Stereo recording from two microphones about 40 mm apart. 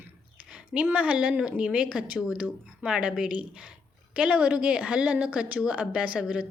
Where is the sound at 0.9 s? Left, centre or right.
Right.